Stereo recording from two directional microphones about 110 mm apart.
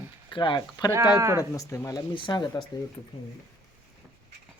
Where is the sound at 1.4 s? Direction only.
30° left (ahead or behind).